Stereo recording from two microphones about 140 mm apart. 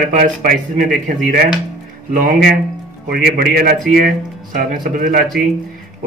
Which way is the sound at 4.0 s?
75° right (ahead or behind).